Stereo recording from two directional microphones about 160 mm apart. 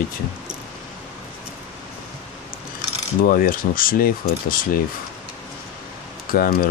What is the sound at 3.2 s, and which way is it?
Speech, 65° left (ahead or behind).